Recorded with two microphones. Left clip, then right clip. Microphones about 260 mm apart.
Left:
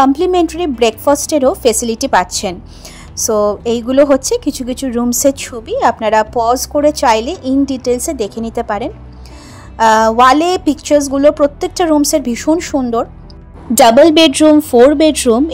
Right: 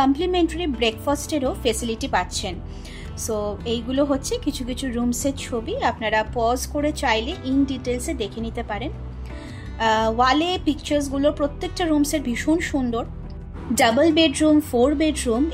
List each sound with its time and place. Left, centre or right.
0.0 s speech: left
13.7 s a woman's voice: left